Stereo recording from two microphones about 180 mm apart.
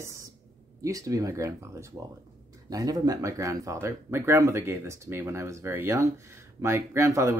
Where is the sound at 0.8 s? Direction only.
20° right (ahead or behind).